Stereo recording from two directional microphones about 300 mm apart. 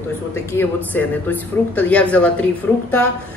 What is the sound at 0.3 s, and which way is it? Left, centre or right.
A man's voice, centre.